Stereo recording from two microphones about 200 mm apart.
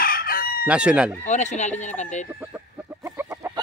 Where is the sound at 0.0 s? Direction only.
45° left (ahead or behind).